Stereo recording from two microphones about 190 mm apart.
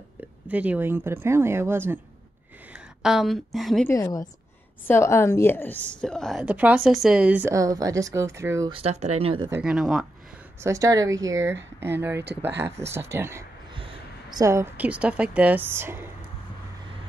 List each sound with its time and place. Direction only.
0.5 s a woman's voice: 5° right (ahead or behind)
3.9 s a woman's voice: 15° left (ahead or behind); by 8.7 s 15° right (ahead or behind)
8.7 s speech: 35° right (ahead or behind)
9.5 s speech: 5° right (ahead or behind)
10.6 s speech: 15° right (ahead or behind)
13.7 s a sound: 30° right (ahead or behind)
14.4 s speech: 15° right (ahead or behind)